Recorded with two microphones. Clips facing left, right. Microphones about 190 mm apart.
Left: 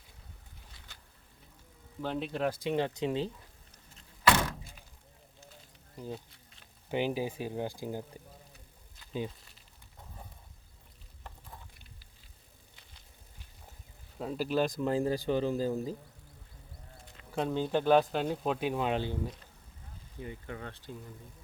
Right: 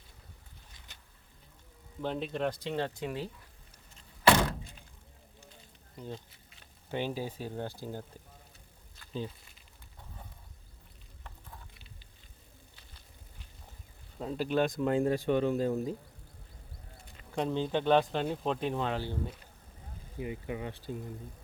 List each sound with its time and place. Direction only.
2.0 s speech: centre (ahead or behind); by 3.2 s 20° left (ahead or behind)
6.0 s speech: 5° left (ahead or behind)
9.0 s insect: 15° left (ahead or behind)
14.2 s speech: 5° left (ahead or behind)
17.2 s speech: 5° left (ahead or behind)
18.9 s speech: 20° left (ahead or behind)
20.1 s speech: 15° right (ahead or behind)